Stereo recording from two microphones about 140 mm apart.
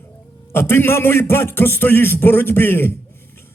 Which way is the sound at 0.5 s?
15° left (ahead or behind).